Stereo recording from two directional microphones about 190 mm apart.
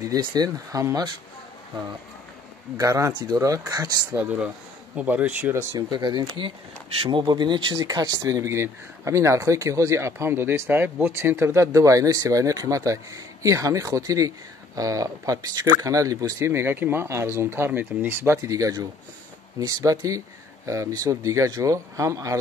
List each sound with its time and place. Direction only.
0.0 s speech: 20° right (ahead or behind)
2.8 s speech: 15° right (ahead or behind)